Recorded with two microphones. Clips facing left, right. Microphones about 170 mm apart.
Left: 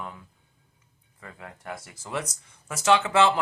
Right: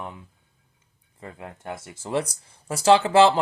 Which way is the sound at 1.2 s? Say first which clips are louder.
Right 4 dB; 25° right (ahead or behind).